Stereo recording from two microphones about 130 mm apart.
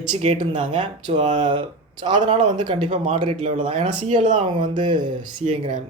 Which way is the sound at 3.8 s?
65° right (ahead or behind).